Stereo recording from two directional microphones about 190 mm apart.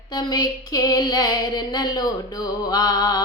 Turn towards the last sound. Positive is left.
turn(degrees=20)  # may be behind; listen again after turning